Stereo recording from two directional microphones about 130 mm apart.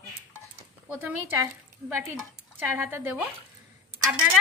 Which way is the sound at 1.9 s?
20° right (ahead or behind).